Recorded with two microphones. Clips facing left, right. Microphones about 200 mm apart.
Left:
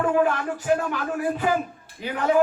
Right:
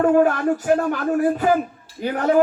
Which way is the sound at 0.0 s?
45° right (ahead or behind).